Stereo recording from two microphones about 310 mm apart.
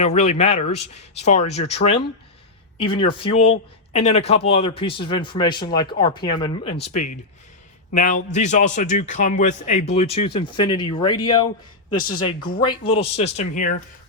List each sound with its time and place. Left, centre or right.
0.0 s a man's voice: left
6.7 s a man's voice: left; by 11.4 s centre
11.9 s speech: left
12.5 s a man's voice: centre